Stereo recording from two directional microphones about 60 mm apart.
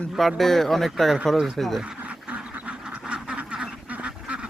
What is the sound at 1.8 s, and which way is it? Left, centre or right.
Duck, centre.